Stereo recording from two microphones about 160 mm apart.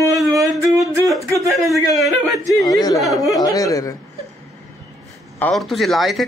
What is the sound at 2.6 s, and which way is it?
Speech, 25° left (ahead or behind).